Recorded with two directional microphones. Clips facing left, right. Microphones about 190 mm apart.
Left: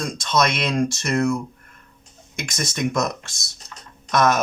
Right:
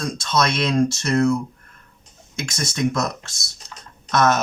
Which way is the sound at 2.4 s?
15° left (ahead or behind).